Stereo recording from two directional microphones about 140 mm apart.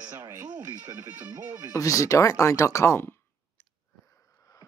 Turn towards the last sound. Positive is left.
turn(degrees=20)  # may be behind; listen again after turning